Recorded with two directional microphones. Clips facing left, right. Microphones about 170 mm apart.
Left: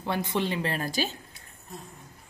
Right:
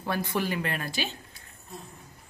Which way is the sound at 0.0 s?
20° left (ahead or behind).